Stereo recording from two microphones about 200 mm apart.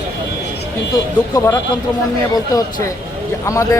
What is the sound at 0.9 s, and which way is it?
Speech, 15° left (ahead or behind).